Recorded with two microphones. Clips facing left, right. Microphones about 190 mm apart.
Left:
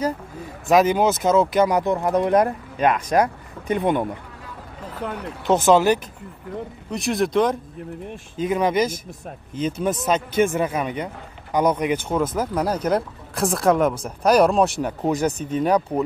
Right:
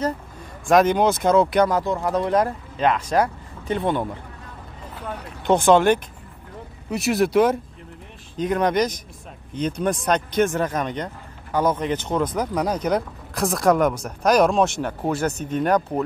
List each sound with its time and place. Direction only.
0.7 s speech: 5° left (ahead or behind)
1.7 s speech: 20° left (ahead or behind)
5.4 s speech: 5° left (ahead or behind)
8.4 s speech: 5° left (ahead or behind)